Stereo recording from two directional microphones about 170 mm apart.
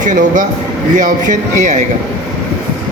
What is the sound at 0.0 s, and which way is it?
Speech, 50° right (ahead or behind).